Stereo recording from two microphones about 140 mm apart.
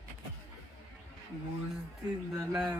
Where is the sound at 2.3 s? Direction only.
10° right (ahead or behind).